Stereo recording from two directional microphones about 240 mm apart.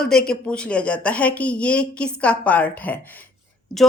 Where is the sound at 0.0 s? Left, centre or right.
Centre.